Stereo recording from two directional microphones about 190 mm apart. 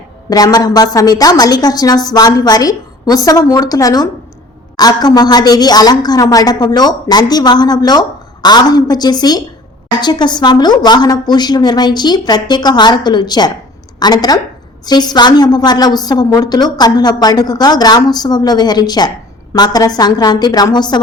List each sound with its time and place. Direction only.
0.3 s a woman's voice: 20° left (ahead or behind)